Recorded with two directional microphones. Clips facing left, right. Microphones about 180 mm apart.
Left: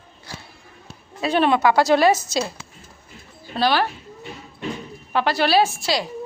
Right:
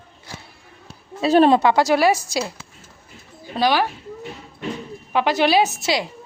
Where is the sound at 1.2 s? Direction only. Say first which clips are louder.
Right 5 dB; 40° right (ahead or behind).